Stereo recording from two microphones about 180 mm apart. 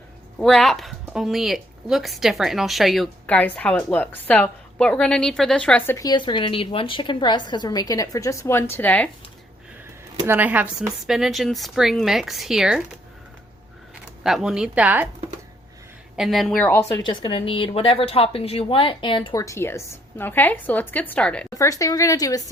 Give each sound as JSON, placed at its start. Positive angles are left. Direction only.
{"t": 0.3, "sound": "a woman's voice", "side_deg": 0}
{"t": 6.1, "sound": "a woman's voice", "side_deg": 25}
{"t": 10.2, "sound": "a woman's voice", "side_deg": -10}
{"t": 13.9, "sound": "speech", "side_deg": -5}
{"t": 16.1, "sound": "a woman's voice", "side_deg": 0}
{"t": 17.1, "sound": "a woman's voice", "side_deg": 30}
{"t": 21.5, "sound": "speech", "side_deg": 20}